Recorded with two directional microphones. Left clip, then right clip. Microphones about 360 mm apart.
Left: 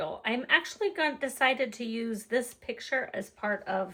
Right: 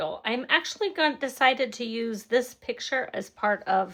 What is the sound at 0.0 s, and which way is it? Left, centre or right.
A woman's voice, centre.